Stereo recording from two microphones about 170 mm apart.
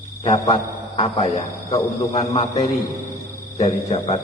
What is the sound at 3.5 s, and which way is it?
Speech, 40° left (ahead or behind).